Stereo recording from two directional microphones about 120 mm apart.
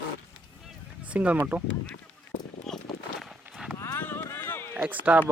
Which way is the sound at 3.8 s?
20° left (ahead or behind).